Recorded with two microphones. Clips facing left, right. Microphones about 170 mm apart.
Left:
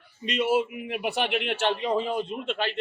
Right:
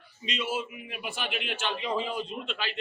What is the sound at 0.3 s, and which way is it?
A man's voice, 60° left (ahead or behind).